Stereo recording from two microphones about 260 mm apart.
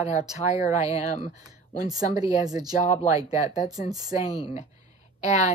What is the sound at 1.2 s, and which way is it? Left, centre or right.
Speech, centre.